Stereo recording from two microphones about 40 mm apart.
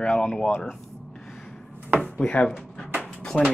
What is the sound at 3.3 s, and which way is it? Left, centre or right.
Speech, left.